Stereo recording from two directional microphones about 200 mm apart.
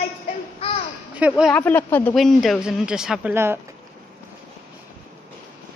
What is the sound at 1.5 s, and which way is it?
Speech, 10° left (ahead or behind).